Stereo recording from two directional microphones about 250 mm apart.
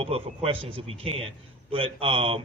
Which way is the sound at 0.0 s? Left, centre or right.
Right.